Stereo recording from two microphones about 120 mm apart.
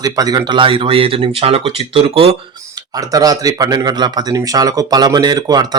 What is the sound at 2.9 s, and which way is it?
Speech, 30° right (ahead or behind).